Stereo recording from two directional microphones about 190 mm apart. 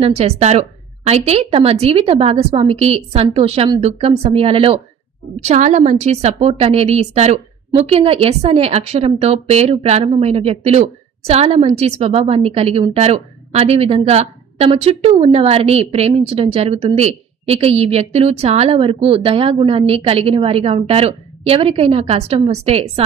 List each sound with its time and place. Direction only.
0.0 s a woman's voice: 35° right (ahead or behind)